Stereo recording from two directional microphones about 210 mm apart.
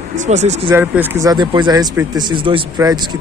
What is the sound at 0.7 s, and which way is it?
Speech, 10° right (ahead or behind).